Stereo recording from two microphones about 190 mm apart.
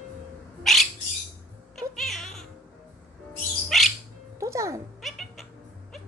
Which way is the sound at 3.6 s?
Centre (ahead or behind).